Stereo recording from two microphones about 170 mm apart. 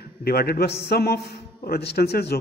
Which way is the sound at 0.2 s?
65° left (ahead or behind).